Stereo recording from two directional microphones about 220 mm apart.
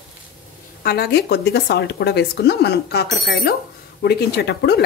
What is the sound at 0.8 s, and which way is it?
Speech, 45° left (ahead or behind).